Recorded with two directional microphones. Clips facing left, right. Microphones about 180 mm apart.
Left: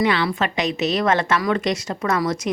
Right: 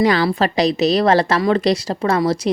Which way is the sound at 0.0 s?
35° right (ahead or behind).